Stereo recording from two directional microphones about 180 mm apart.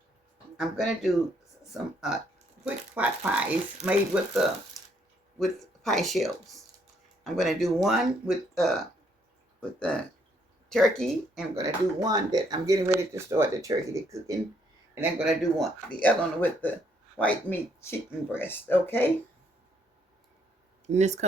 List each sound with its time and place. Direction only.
0.5 s speech: centre (ahead or behind)
2.6 s speech: 10° right (ahead or behind)
11.5 s speech: 20° right (ahead or behind); by 19.1 s 10° left (ahead or behind)
20.8 s speech: 40° right (ahead or behind)